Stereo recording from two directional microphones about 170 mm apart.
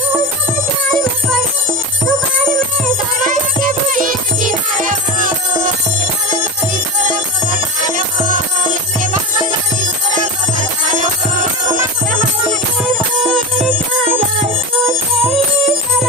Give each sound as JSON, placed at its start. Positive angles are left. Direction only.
{"t": 3.2, "sound": "music", "side_deg": -55}
{"t": 13.2, "sound": "music", "side_deg": 0}